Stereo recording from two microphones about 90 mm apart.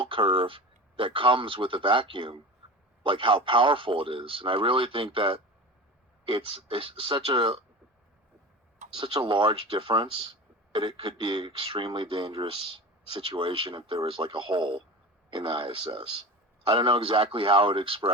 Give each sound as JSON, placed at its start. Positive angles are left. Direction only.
{"t": 0.0, "sound": "a man's voice", "side_deg": -75}
{"t": 9.0, "sound": "speech", "side_deg": -65}
{"t": 16.6, "sound": "a man's voice", "side_deg": -75}